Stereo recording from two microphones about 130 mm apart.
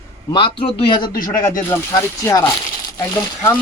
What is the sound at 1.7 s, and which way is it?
Speech, 25° left (ahead or behind).